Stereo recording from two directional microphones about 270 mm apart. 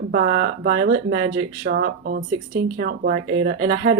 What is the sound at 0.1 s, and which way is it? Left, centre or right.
Speech, right.